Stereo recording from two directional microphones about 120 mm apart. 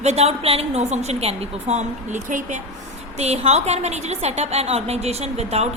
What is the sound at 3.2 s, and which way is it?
A woman's voice, 60° right (ahead or behind).